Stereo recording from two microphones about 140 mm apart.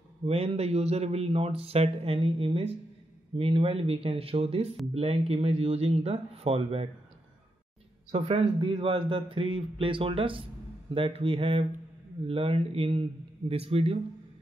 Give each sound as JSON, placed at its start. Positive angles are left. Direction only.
{"t": 0.2, "sound": "a man's voice", "side_deg": -45}
{"t": 8.1, "sound": "a man's voice", "side_deg": -45}